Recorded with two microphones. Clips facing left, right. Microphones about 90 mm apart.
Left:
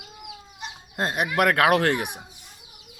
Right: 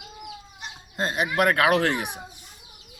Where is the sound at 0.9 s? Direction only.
60° left (ahead or behind).